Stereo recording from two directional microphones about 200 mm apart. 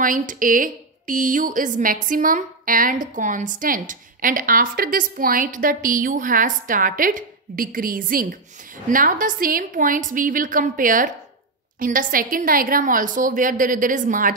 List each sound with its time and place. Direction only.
0.0 s a woman's voice: 40° right (ahead or behind)